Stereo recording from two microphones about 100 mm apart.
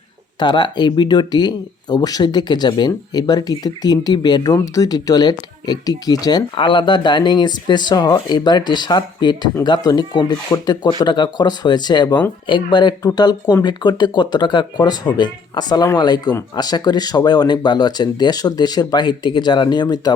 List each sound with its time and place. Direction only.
0.3 s speech: 50° left (ahead or behind)
6.6 s speech: 55° left (ahead or behind)